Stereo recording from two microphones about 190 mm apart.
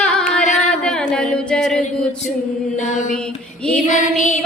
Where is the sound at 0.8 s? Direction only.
5° left (ahead or behind).